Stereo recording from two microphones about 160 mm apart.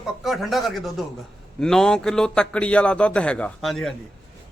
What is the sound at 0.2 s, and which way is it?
A man's voice, centre (ahead or behind).